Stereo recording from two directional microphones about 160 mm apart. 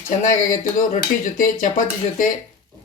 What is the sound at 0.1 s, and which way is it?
Speech, 50° left (ahead or behind).